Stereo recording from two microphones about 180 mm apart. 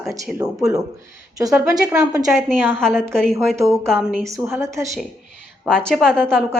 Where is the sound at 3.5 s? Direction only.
15° right (ahead or behind).